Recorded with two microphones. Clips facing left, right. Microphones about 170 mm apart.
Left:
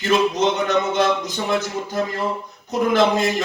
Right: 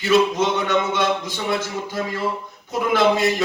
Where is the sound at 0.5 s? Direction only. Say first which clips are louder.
Left 1 dB; 45° left (ahead or behind).